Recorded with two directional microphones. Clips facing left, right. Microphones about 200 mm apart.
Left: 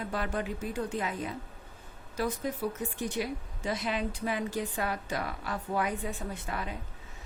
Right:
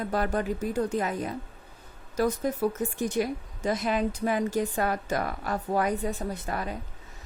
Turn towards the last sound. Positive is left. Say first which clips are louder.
# right 4 dB
turn(degrees=-40)  # may be behind; listen again after turning